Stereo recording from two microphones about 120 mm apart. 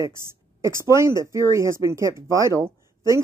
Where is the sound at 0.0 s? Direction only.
25° right (ahead or behind).